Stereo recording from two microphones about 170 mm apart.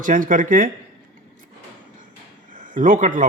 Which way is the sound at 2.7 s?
50° right (ahead or behind).